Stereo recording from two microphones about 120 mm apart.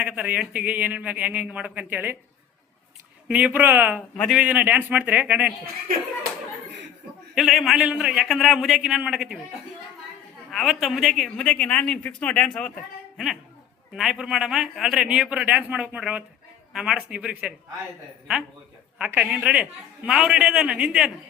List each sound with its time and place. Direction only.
0.0 s speech: 10° right (ahead or behind)
3.2 s speech: 10° right (ahead or behind)
7.3 s a man's voice: centre (ahead or behind)
10.5 s a man's voice: centre (ahead or behind)
18.9 s speech: 10° right (ahead or behind)